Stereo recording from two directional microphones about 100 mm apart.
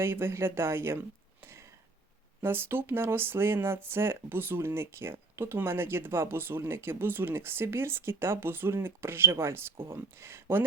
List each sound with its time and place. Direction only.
0.0 s speech: 25° right (ahead or behind)
2.4 s speech: 25° right (ahead or behind)